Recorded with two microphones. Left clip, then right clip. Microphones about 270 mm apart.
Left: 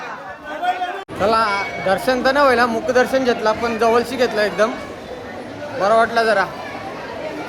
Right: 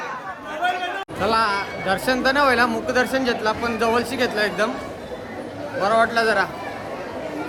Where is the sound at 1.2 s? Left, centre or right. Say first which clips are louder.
Left 3 dB; centre.